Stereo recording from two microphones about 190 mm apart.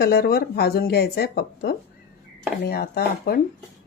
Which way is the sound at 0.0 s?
55° left (ahead or behind).